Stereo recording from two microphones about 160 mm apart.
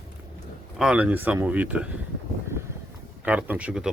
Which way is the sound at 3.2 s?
10° right (ahead or behind).